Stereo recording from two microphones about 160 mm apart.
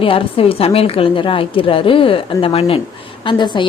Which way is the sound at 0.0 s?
35° left (ahead or behind).